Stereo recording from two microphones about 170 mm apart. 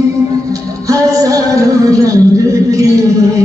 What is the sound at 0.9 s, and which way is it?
Music, 20° right (ahead or behind).